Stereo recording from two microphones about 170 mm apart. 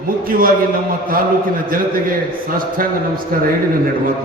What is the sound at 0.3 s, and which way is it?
Speech, 55° right (ahead or behind).